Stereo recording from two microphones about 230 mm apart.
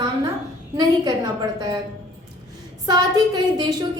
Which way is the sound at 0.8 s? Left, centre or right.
Centre.